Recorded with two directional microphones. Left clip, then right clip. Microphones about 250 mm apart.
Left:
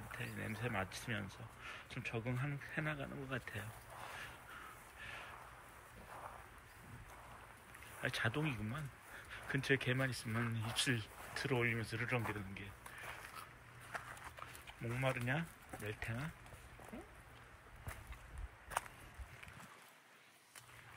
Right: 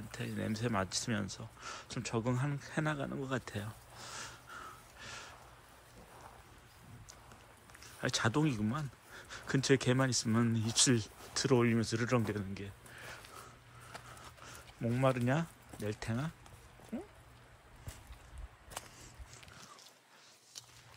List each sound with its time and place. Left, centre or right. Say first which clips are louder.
0.1 s speech: right 5 dB; centre
8.0 s speech: right 6 dB; centre
10.2 s speech: right 8 dB; right
10.5 s speech: right 7 dB; centre
14.9 s speech: right 7 dB; centre
16.9 s speech: right 10 dB; right